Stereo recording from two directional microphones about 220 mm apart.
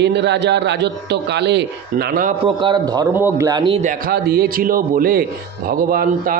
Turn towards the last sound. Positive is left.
turn(degrees=-40)  # may be behind; listen again after turning